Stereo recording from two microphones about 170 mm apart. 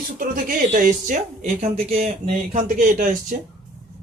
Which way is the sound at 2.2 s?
50° right (ahead or behind).